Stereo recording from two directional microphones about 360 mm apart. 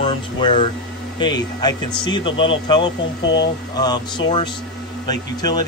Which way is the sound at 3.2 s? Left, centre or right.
Left.